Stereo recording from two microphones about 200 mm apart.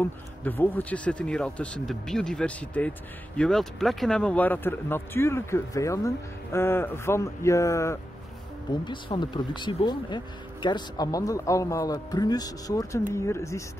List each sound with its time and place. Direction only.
0.0 s speech: 10° left (ahead or behind)